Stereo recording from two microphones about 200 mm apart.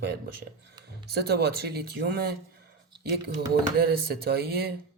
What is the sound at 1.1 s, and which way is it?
Speech, 55° right (ahead or behind).